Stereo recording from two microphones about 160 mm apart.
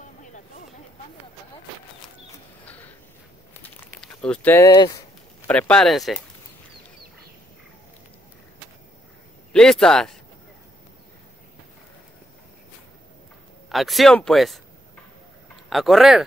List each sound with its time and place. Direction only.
0.2 s a sound: 50° left (ahead or behind)
4.0 s a sound: 5° left (ahead or behind)
4.6 s speech: 20° left (ahead or behind)
5.5 s speech: 5° left (ahead or behind)
9.5 s speech: 5° left (ahead or behind)
13.7 s speech: centre (ahead or behind)
15.7 s speech: centre (ahead or behind)